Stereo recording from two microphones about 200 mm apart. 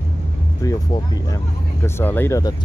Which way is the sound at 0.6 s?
15° left (ahead or behind).